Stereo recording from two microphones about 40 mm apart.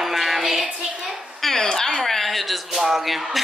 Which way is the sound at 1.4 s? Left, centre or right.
Centre.